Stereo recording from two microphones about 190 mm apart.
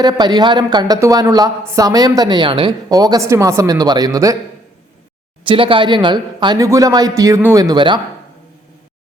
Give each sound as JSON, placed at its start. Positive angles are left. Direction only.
{"t": 0.0, "sound": "a woman's voice", "side_deg": -20}
{"t": 5.5, "sound": "a woman's voice", "side_deg": -25}